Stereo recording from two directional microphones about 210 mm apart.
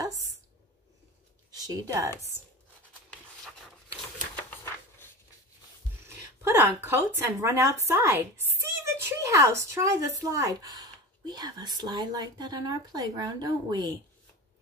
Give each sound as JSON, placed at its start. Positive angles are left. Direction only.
{"t": 1.7, "sound": "a woman's voice", "side_deg": -15}
{"t": 4.4, "sound": "a sound", "side_deg": 10}
{"t": 6.4, "sound": "a woman's voice", "side_deg": -10}